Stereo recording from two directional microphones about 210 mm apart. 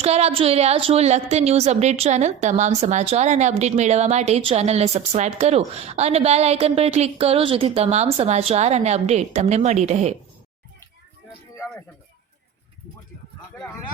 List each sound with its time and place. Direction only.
0.0 s a woman's voice: 30° right (ahead or behind)